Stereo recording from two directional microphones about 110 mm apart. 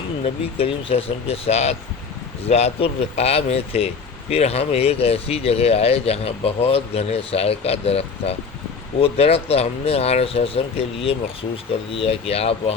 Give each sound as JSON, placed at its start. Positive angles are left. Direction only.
{"t": 0.5, "sound": "speech", "side_deg": 60}